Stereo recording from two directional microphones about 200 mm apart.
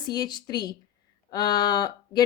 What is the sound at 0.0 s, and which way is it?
Speech, 20° left (ahead or behind).